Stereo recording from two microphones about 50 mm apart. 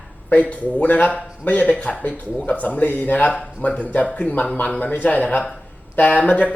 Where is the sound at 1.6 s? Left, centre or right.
Left.